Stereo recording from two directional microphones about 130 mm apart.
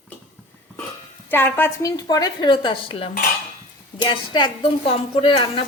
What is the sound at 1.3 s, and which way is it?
Speech, 15° left (ahead or behind).